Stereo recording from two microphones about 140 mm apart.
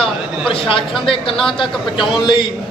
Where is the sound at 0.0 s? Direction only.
40° left (ahead or behind).